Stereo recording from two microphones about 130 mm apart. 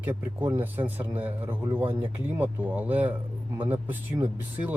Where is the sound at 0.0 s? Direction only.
15° right (ahead or behind).